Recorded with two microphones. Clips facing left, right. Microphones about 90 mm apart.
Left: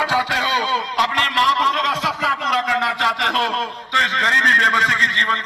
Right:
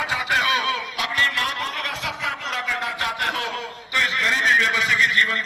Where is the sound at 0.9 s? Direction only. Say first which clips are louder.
Left 9 dB; 50° left (ahead or behind).